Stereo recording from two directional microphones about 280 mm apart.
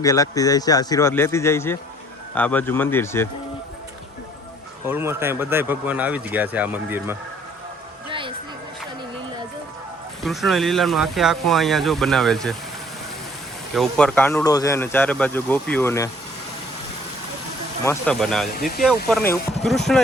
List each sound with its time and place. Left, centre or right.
0.0 s speech: centre
4.9 s speech: centre
10.2 s speech: centre
13.7 s speech: centre
17.8 s speech: centre